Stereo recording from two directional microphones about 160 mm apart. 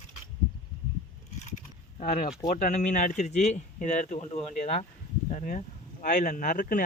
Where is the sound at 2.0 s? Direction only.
50° left (ahead or behind).